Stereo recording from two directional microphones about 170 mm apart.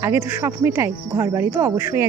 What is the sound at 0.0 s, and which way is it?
Speech, 15° right (ahead or behind).